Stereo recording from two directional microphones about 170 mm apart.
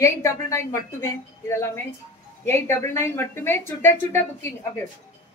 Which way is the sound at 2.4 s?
15° left (ahead or behind).